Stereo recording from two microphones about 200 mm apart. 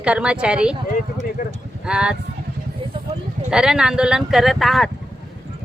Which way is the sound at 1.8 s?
5° right (ahead or behind).